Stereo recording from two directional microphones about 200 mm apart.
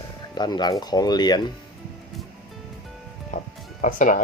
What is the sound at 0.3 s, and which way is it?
Speech, 20° left (ahead or behind).